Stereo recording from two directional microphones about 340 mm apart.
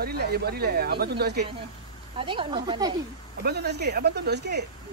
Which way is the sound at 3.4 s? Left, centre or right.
Right.